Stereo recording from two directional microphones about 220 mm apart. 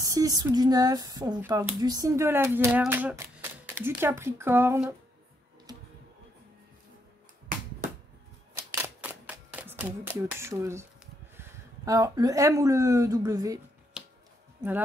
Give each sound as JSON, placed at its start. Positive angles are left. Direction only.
{"t": 0.0, "sound": "speech", "side_deg": -15}
{"t": 8.8, "sound": "typewriter", "side_deg": -10}
{"t": 11.3, "sound": "speech", "side_deg": -15}